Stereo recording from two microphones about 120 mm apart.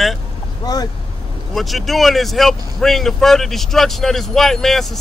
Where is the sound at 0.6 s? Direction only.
35° left (ahead or behind).